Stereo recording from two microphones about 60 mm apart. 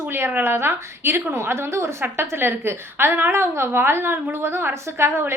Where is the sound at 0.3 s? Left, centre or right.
Right.